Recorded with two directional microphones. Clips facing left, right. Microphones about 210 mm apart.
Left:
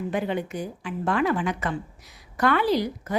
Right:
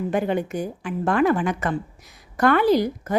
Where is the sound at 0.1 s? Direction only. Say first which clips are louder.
Right 4 dB; 50° right (ahead or behind).